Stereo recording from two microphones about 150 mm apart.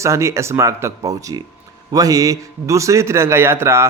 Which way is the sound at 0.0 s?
20° right (ahead or behind).